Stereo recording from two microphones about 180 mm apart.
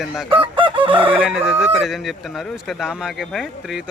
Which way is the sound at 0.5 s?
25° right (ahead or behind).